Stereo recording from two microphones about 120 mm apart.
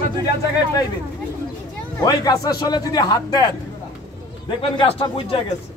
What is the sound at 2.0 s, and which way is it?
A man's voice, 35° left (ahead or behind).